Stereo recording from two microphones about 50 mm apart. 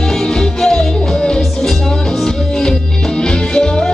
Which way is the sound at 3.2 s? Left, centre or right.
Centre.